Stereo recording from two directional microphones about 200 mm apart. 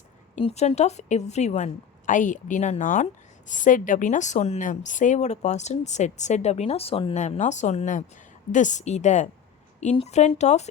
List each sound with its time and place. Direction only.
0.3 s a woman's voice: 35° left (ahead or behind)